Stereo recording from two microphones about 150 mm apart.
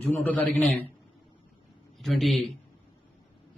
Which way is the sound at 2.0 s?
Centre (ahead or behind).